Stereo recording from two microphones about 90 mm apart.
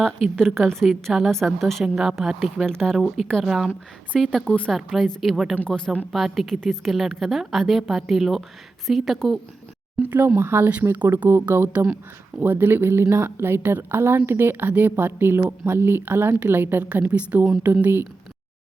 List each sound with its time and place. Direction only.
0.3 s a woman's voice: 5° left (ahead or behind)
5.5 s a woman's voice: 10° left (ahead or behind)
6.1 s a woman's voice: centre (ahead or behind)
10.0 s a woman's voice: 25° right (ahead or behind)